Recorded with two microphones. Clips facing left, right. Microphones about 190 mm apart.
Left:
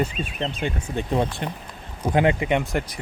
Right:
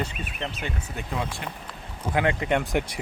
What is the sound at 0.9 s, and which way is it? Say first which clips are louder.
Speech: left 9 dB; 35° left (ahead or behind).